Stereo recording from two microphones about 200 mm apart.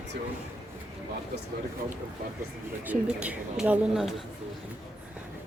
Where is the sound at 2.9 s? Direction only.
5° right (ahead or behind).